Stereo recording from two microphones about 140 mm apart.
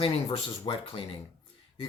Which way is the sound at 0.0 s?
40° left (ahead or behind).